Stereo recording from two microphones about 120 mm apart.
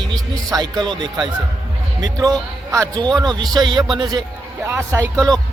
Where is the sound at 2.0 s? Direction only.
30° right (ahead or behind).